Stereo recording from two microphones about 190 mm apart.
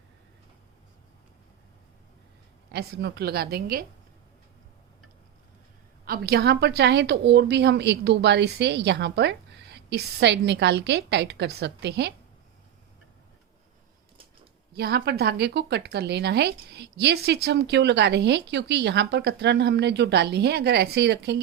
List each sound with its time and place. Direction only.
2.7 s a woman's voice: 55° right (ahead or behind)
6.1 s a woman's voice: 55° right (ahead or behind)
14.7 s a woman's voice: 55° right (ahead or behind)